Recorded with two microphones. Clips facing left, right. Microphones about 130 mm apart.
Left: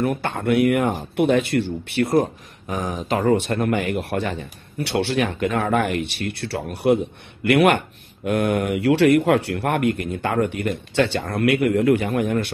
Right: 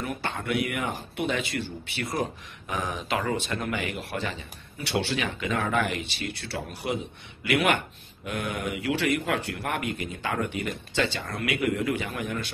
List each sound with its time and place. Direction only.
0.0 s a man's voice: 60° left (ahead or behind)
2.7 s a man's voice: 40° left (ahead or behind); by 12.4 s 55° left (ahead or behind)